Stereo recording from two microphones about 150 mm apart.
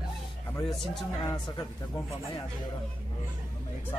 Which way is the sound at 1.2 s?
25° left (ahead or behind).